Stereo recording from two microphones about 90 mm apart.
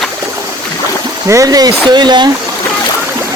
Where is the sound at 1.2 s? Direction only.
40° right (ahead or behind); by 2.2 s 55° right (ahead or behind).